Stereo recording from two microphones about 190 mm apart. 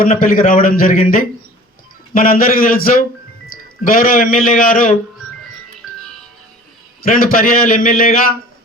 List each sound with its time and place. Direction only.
0.0 s a man's voice: 45° left (ahead or behind)
5.8 s music: centre (ahead or behind)
7.0 s a man's voice: 50° left (ahead or behind)